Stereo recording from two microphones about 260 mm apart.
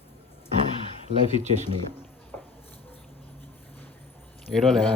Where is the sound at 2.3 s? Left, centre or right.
Centre.